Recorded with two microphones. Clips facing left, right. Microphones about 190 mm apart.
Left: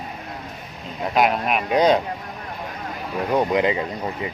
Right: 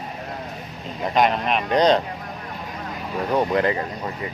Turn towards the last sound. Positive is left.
turn(degrees=15)  # may be behind; listen again after turning